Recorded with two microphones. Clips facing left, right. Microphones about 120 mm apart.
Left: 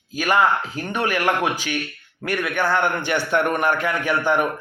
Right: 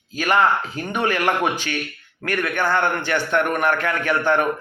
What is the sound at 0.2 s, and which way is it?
Speech, 10° left (ahead or behind).